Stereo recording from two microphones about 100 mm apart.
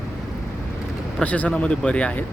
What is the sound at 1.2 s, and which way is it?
Speech, 15° left (ahead or behind).